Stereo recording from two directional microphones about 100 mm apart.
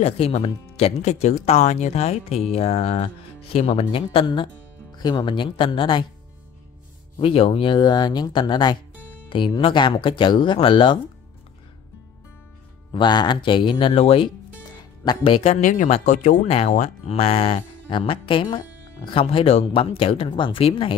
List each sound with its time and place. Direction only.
0.0 s speech: 85° left
3.9 s speech: 65° left (ahead or behind)
4.9 s speech: 45° left (ahead or behind)
7.2 s speech: 70° left (ahead or behind)
12.9 s speech: 50° left (ahead or behind); by 20.9 s 65° left (ahead or behind)